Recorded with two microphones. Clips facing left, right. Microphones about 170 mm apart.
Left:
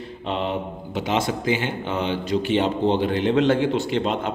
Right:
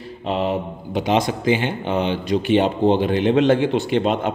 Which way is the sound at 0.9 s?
15° right (ahead or behind).